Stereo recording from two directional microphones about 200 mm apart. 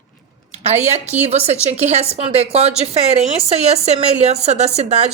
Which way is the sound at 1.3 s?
30° right (ahead or behind).